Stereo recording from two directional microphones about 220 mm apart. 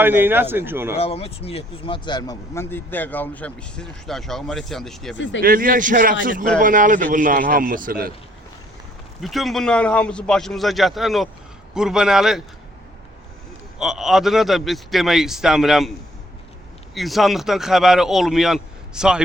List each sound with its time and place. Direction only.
0.0 s speech: 10° right (ahead or behind)
0.9 s speech: 25° left (ahead or behind); by 5.1 s centre (ahead or behind)
5.1 s speech: 55° left (ahead or behind)
5.4 s a man's voice: 40° right (ahead or behind)
9.2 s speech: centre (ahead or behind)
13.7 s speech: centre (ahead or behind)
16.9 s speech: centre (ahead or behind)